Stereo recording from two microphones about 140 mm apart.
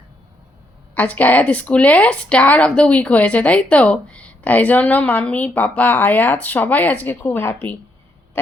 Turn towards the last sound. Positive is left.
turn(degrees=15)  # may be behind; listen again after turning